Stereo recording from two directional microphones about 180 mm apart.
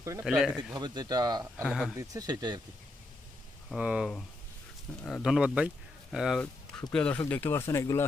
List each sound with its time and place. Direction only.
0.0 s speech: 15° right (ahead or behind)
0.3 s speech: 5° right (ahead or behind)
0.7 s speech: 25° right (ahead or behind)
1.6 s speech: centre (ahead or behind)
2.0 s speech: 20° right (ahead or behind)
3.7 s speech: 5° right (ahead or behind); by 8.0 s 15° left (ahead or behind)